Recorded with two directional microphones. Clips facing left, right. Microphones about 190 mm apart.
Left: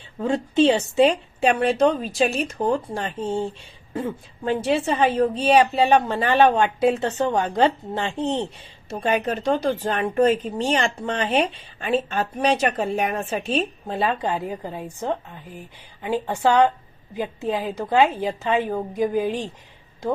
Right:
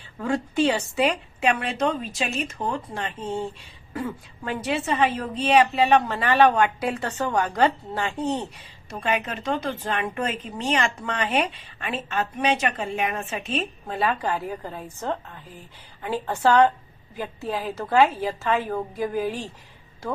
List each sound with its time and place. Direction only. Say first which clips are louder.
0.2 s a woman's voice: left 4 dB; 25° left (ahead or behind)